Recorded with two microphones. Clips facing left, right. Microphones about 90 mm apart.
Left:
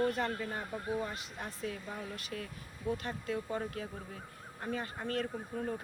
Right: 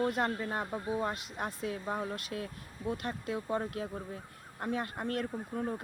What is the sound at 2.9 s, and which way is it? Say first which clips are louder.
Speech: right 1 dB; 55° right (ahead or behind).